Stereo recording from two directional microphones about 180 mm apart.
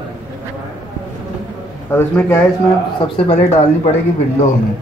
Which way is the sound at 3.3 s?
40° left (ahead or behind).